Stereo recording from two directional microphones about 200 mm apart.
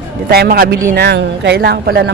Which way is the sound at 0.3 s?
50° right (ahead or behind).